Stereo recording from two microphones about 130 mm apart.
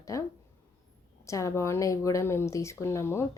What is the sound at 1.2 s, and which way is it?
A woman's voice, 25° left (ahead or behind).